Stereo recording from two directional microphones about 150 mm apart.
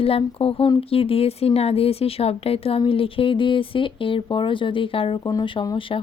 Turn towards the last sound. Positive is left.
turn(degrees=25)  # may be behind; listen again after turning